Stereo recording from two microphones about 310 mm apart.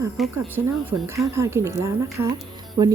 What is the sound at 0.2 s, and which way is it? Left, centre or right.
Speech, centre.